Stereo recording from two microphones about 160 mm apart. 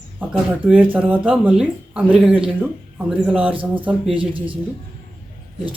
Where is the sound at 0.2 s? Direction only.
10° right (ahead or behind).